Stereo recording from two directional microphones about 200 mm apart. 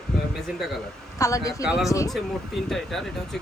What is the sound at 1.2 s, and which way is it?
Speech, 15° left (ahead or behind).